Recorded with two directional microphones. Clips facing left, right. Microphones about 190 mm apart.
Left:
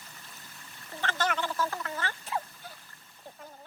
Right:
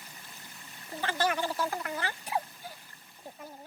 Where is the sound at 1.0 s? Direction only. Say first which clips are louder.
Right 1 dB; 15° right (ahead or behind).